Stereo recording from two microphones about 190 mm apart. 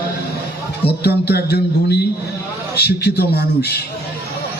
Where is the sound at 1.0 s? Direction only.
60° left (ahead or behind).